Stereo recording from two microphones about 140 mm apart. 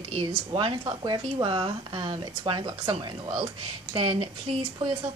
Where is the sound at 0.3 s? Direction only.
40° right (ahead or behind).